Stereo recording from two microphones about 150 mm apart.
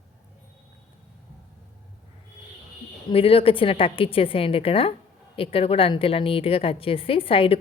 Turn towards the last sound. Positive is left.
turn(degrees=40)  # may be behind; listen again after turning